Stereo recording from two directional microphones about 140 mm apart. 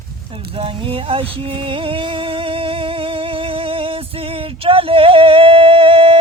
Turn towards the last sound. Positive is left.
turn(degrees=-40)  # may be behind; listen again after turning